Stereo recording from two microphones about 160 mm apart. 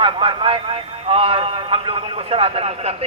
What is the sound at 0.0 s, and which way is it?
A man's voice, 35° right (ahead or behind).